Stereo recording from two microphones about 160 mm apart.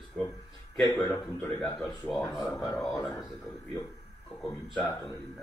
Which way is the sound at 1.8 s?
5° left (ahead or behind).